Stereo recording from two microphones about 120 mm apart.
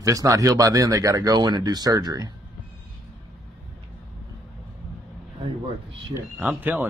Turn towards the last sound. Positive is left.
turn(degrees=-15)  # may be behind; listen again after turning